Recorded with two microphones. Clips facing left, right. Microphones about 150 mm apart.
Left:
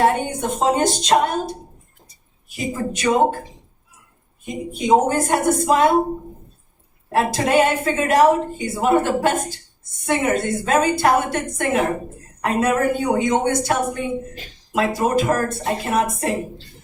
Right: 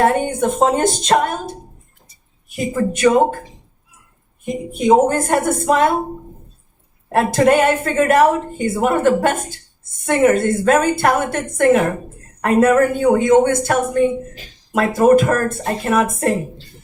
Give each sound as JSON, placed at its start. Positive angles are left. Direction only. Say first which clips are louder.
{"t": 0.3, "sound": "a woman's voice", "louder": "right 4 dB", "side_deg": -50}
{"t": 2.7, "sound": "a woman's voice", "louder": "right 11 dB", "side_deg": -50}
{"t": 4.4, "sound": "a woman's voice", "louder": "right 4 dB", "side_deg": -50}
{"t": 7.1, "sound": "a woman's voice", "louder": "right 5 dB", "side_deg": -50}